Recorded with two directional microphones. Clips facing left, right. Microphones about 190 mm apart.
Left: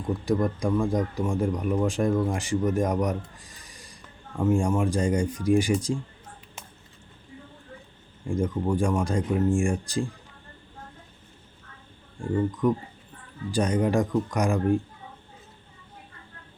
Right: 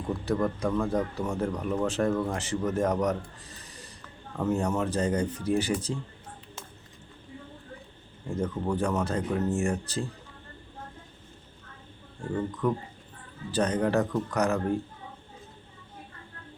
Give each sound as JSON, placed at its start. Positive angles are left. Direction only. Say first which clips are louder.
{"t": 0.3, "sound": "a man's voice", "louder": "left 3 dB", "side_deg": 10}
{"t": 8.3, "sound": "a man's voice", "louder": "left 3 dB", "side_deg": 10}
{"t": 12.5, "sound": "a man's voice", "louder": "left 4 dB", "side_deg": 15}